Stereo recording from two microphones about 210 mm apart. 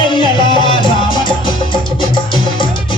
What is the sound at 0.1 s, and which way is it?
Music, 20° left (ahead or behind).